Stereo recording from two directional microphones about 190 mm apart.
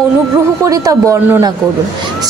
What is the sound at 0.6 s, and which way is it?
Speech, 15° right (ahead or behind).